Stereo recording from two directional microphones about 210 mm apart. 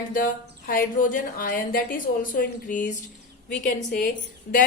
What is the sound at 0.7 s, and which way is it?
Speech, 40° left (ahead or behind).